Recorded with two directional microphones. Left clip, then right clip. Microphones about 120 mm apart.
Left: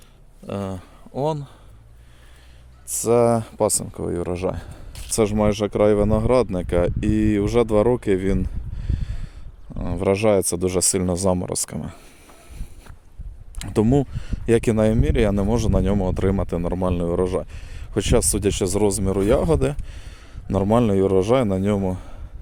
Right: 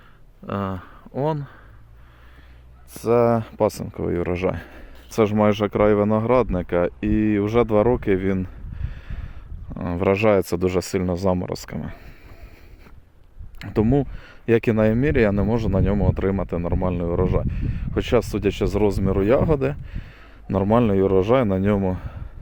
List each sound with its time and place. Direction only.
0.4 s speech: 10° left (ahead or behind)
2.9 s speech: 35° left (ahead or behind)
3.6 s speech: 15° left (ahead or behind)
5.1 s speech: 15° left (ahead or behind)
9.6 s speech: 15° left (ahead or behind)
10.8 s speech: 35° left (ahead or behind)
13.6 s speech: 30° left (ahead or behind)